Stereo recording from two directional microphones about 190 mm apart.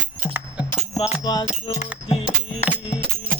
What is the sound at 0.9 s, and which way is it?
Music, 20° left (ahead or behind).